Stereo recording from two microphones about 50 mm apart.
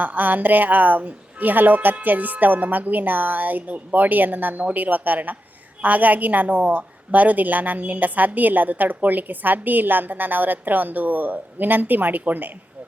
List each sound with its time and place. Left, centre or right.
0.0 s a woman's voice: right